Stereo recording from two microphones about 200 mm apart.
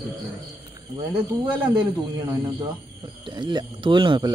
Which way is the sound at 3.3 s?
20° right (ahead or behind).